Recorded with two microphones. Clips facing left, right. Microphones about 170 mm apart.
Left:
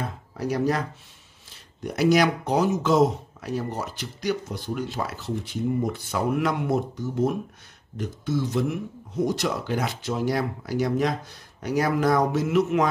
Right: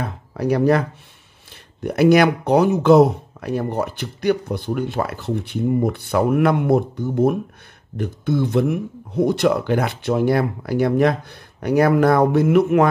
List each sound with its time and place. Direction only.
0.0 s speech: 60° right (ahead or behind)